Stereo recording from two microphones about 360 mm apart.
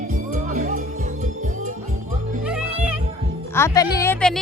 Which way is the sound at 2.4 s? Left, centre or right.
Centre.